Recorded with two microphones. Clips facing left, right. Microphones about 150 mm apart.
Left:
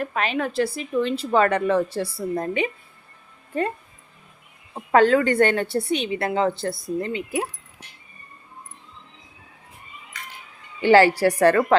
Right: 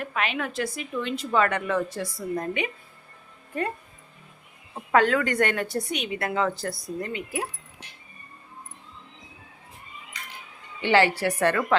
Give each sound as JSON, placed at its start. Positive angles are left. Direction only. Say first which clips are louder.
{"t": 0.0, "sound": "a woman's voice", "louder": "left 4 dB", "side_deg": 40}
{"t": 4.7, "sound": "a woman's voice", "louder": "left 5 dB", "side_deg": 30}
{"t": 10.8, "sound": "a woman's voice", "louder": "left 6 dB", "side_deg": 40}